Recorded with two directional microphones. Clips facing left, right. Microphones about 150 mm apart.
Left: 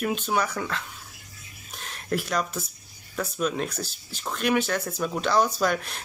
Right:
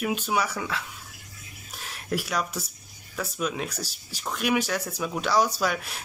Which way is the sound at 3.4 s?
5° right (ahead or behind).